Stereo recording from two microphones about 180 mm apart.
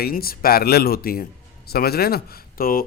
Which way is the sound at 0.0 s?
55° left (ahead or behind).